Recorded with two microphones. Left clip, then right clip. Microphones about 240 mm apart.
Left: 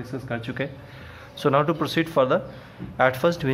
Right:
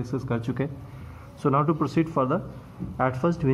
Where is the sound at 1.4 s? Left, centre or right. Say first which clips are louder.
Left 3 dB; left.